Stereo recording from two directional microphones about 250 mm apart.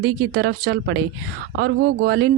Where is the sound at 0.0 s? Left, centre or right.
Right.